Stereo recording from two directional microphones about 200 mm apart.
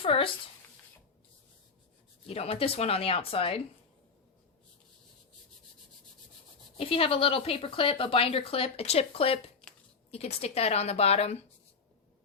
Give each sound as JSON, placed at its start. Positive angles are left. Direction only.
{"t": 0.0, "sound": "speech", "side_deg": 30}
{"t": 2.2, "sound": "speech", "side_deg": 30}
{"t": 6.7, "sound": "a woman's voice", "side_deg": 30}